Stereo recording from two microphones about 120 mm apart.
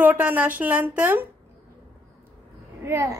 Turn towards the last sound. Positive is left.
turn(degrees=-25)  # may be behind; listen again after turning